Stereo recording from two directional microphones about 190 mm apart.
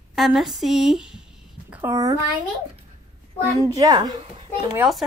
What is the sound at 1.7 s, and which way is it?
Speech, 15° right (ahead or behind).